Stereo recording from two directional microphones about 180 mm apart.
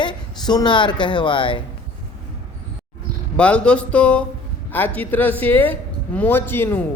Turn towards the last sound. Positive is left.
turn(degrees=10)  # may be behind; listen again after turning